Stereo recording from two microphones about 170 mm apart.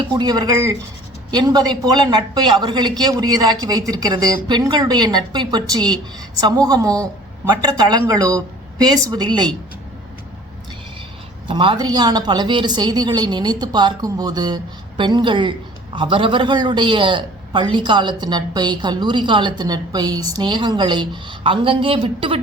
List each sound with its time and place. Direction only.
0.1 s a man's voice: 25° right (ahead or behind)
11.4 s a man's voice: 30° right (ahead or behind)